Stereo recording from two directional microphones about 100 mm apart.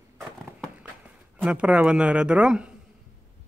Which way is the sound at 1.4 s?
10° right (ahead or behind).